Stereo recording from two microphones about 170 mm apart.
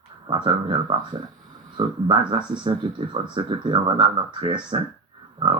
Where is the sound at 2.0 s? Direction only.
25° right (ahead or behind).